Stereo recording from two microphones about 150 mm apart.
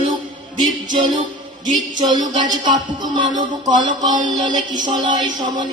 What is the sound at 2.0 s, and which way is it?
Music, 25° right (ahead or behind).